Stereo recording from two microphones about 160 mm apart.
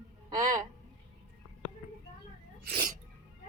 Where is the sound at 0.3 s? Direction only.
20° right (ahead or behind).